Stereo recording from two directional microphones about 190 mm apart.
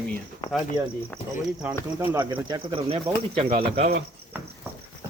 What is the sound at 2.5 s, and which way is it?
Speech, 25° right (ahead or behind).